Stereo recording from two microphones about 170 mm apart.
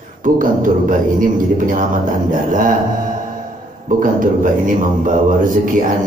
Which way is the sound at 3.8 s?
50° right (ahead or behind).